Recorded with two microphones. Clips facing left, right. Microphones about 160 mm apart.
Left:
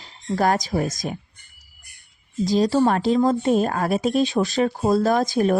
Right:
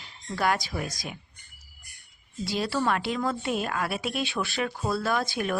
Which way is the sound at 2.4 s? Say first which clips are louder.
Left 9 dB; 40° left (ahead or behind).